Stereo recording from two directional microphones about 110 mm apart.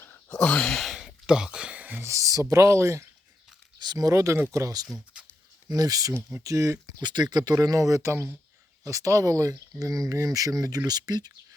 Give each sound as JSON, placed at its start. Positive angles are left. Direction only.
{"t": 0.0, "sound": "speech", "side_deg": 15}
{"t": 3.8, "sound": "speech", "side_deg": -40}
{"t": 4.9, "sound": "speech", "side_deg": 0}
{"t": 5.6, "sound": "speech", "side_deg": -35}
{"t": 7.0, "sound": "speech", "side_deg": -40}